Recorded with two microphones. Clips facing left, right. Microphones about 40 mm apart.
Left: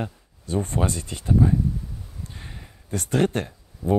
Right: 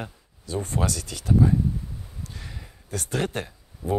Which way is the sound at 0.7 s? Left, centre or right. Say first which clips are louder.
Left 2 dB; left.